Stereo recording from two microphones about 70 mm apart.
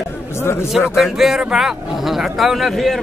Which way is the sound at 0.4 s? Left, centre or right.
Left.